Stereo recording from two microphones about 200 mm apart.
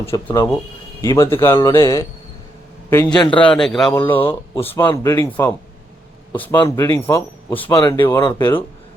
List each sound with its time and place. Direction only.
0.0 s a man's voice: 15° left (ahead or behind)
3.9 s speech: 20° left (ahead or behind)
7.8 s speech: 25° left (ahead or behind)